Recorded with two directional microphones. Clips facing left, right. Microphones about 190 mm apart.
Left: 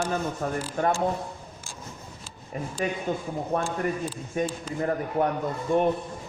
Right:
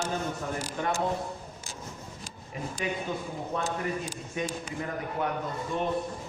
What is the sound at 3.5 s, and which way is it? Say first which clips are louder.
Speech: left 4 dB; 55° left (ahead or behind).